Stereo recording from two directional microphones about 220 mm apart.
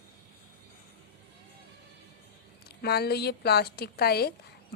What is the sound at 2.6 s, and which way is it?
A woman's voice, 45° left (ahead or behind).